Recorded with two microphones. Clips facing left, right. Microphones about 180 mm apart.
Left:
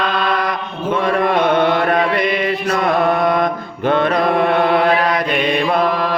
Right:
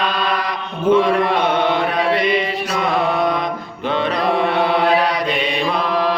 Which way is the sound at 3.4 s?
50° left (ahead or behind).